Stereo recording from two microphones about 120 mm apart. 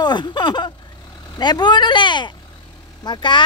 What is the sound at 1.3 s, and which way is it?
Speech, 35° left (ahead or behind).